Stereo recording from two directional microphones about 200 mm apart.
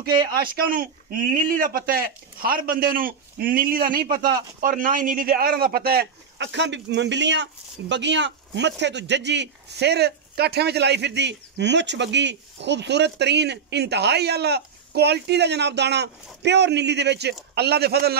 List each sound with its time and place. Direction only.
0.3 s a man's voice: 45° right (ahead or behind)